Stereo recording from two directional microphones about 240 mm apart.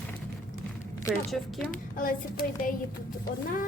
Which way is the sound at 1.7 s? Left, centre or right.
Left.